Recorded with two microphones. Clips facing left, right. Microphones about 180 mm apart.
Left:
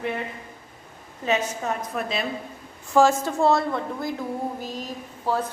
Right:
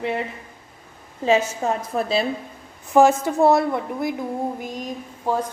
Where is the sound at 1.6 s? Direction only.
30° right (ahead or behind).